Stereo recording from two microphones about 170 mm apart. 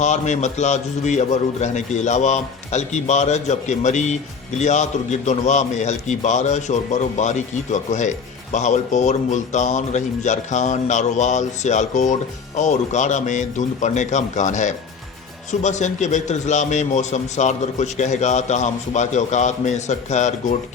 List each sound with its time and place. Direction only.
0.0 s a man's voice: 45° left (ahead or behind)